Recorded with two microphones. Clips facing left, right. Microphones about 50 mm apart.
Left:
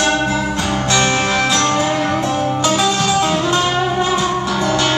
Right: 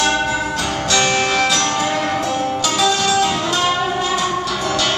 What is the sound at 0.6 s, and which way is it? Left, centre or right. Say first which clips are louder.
Music: left 2 dB; left.